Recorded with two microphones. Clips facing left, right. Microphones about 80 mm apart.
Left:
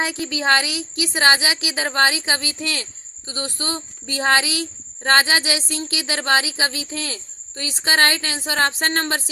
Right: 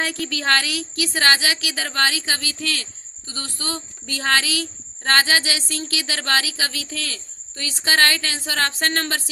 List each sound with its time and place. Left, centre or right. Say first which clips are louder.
0.0 s speech: left 2 dB; centre